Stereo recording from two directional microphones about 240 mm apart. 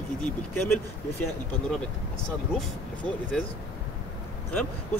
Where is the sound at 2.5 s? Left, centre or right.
Centre.